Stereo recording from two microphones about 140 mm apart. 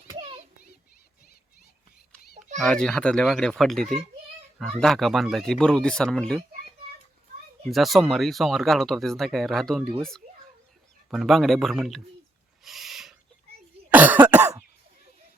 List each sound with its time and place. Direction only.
0.1 s a sound: 40° right (ahead or behind)
2.6 s speech: 5° left (ahead or behind)
7.7 s speech: centre (ahead or behind)
11.1 s speech: centre (ahead or behind)
12.6 s owl: centre (ahead or behind)
13.9 s cough: 10° right (ahead or behind)